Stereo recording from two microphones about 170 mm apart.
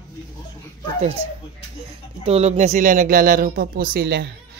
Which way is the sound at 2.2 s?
35° right (ahead or behind).